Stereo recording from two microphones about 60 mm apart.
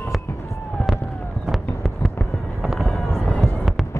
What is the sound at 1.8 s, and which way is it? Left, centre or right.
Fireworks, centre.